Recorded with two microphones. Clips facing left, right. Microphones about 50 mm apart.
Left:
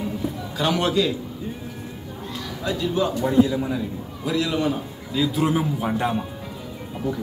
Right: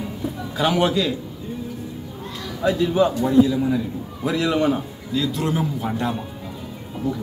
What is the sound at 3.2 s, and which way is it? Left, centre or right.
Speech, centre.